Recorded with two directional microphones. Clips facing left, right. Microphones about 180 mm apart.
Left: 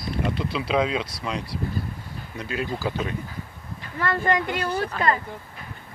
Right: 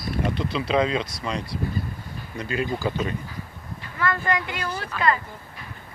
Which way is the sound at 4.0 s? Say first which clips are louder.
Left 2 dB; 40° left (ahead or behind).